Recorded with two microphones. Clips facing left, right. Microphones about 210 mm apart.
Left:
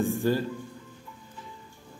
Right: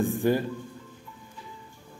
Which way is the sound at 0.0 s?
15° right (ahead or behind).